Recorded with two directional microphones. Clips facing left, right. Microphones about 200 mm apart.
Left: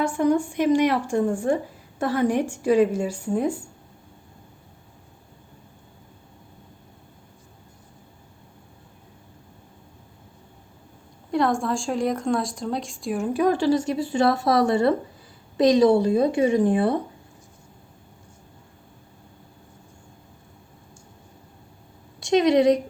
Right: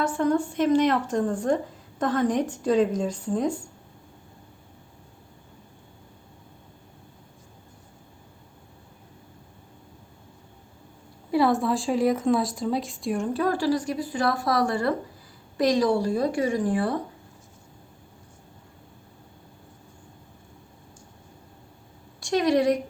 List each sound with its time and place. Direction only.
0.0 s speech: 15° left (ahead or behind)
11.3 s a woman's voice: 5° right (ahead or behind); by 17.0 s 20° left (ahead or behind)
22.2 s a woman's voice: 20° left (ahead or behind)